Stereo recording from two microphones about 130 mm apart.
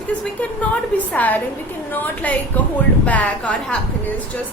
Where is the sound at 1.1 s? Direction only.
15° left (ahead or behind).